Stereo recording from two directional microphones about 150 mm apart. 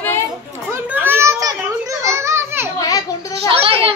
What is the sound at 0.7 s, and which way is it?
Children playing, 15° right (ahead or behind).